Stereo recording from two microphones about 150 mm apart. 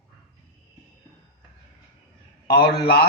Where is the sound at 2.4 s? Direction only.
90° left.